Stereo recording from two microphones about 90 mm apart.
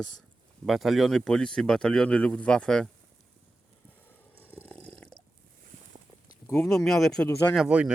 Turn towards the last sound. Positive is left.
turn(degrees=-15)  # may be behind; listen again after turning